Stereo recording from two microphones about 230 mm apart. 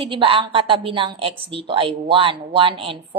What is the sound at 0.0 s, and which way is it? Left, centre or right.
A woman's voice, right.